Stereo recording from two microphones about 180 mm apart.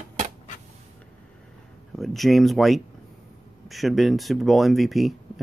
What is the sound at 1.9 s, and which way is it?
Speech, centre (ahead or behind).